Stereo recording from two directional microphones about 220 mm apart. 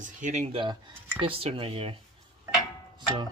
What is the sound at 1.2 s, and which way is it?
Cutlery, 25° right (ahead or behind).